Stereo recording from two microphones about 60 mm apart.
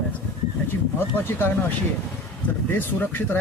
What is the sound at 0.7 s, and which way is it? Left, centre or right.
Speech, left.